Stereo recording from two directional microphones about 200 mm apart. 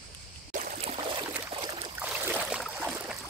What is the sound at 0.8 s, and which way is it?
Boat, 25° right (ahead or behind).